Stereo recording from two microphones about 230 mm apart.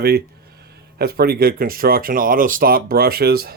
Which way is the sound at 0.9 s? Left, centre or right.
Right.